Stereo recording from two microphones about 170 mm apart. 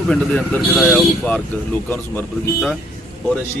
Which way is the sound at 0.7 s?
5° right (ahead or behind).